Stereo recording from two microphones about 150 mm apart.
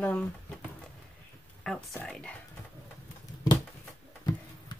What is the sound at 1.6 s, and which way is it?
Speech, centre (ahead or behind).